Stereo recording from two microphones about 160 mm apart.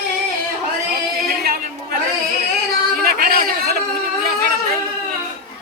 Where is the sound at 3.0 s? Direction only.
70° right (ahead or behind).